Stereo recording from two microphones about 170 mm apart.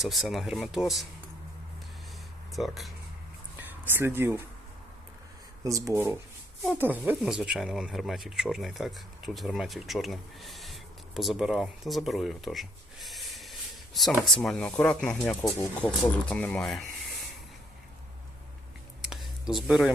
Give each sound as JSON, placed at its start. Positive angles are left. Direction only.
{"t": 0.0, "sound": "speech", "side_deg": 0}
{"t": 2.5, "sound": "speech", "side_deg": 0}
{"t": 3.6, "sound": "speech", "side_deg": -10}
{"t": 5.6, "sound": "speech", "side_deg": -20}
{"t": 19.5, "sound": "speech", "side_deg": 0}